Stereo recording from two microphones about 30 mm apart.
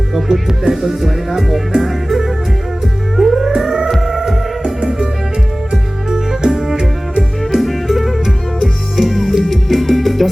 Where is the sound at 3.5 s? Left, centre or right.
Centre.